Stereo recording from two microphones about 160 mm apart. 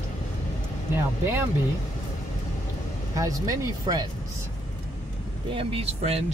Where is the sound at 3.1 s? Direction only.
20° right (ahead or behind).